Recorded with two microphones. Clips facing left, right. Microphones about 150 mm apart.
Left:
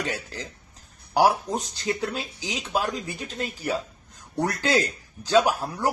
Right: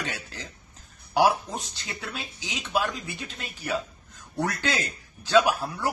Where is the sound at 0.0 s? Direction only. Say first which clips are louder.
Left 4 dB; 40° left (ahead or behind).